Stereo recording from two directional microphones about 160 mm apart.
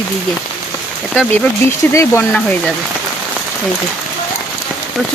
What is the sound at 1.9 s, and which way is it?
Speech, 15° left (ahead or behind).